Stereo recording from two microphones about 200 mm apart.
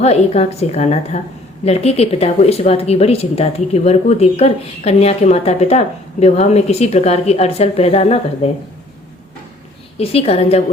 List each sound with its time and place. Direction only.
0.0 s speech: 30° left (ahead or behind)
10.0 s a woman's voice: 30° left (ahead or behind)